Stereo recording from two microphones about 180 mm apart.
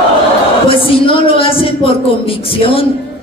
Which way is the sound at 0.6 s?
30° left (ahead or behind).